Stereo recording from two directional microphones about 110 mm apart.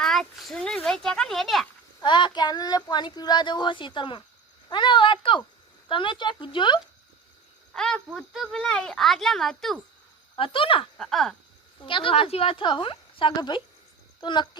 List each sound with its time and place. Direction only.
0.0 s speech: 5° left (ahead or behind)
2.0 s speech: 45° left (ahead or behind)
7.7 s a woman's voice: 5° left (ahead or behind)
10.3 s speech: 55° left (ahead or behind)
10.9 s a woman's voice: 5° left (ahead or behind)
11.9 s speech: 50° left (ahead or behind)